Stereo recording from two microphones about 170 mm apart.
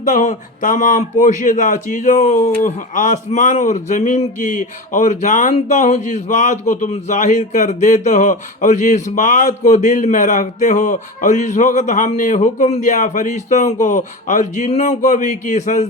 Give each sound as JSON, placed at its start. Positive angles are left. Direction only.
{"t": 0.0, "sound": "speech", "side_deg": 50}